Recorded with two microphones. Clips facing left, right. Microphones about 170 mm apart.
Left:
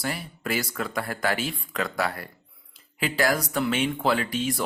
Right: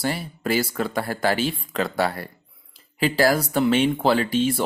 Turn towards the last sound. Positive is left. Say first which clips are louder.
# right 5 dB
turn(degrees=-30)  # may be behind; listen again after turning